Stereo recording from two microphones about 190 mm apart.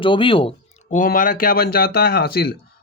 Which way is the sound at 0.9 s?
45° left (ahead or behind).